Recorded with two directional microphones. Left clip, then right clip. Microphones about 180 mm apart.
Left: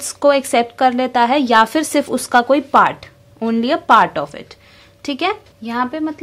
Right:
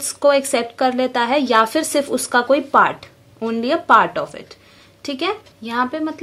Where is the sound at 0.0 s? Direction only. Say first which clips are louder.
Left 1 dB; 35° left (ahead or behind).